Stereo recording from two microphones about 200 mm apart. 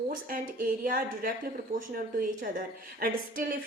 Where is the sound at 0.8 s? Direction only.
45° right (ahead or behind).